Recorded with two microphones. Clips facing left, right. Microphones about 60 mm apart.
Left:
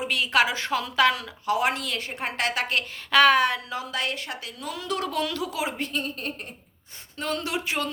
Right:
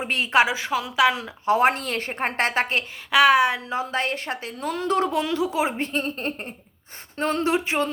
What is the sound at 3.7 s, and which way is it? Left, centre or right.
A woman's voice, right.